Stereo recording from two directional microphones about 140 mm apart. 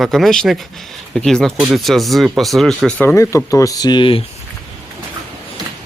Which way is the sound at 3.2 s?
20° left (ahead or behind).